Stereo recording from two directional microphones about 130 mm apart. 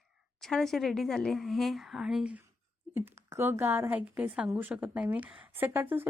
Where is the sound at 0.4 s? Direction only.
Centre (ahead or behind).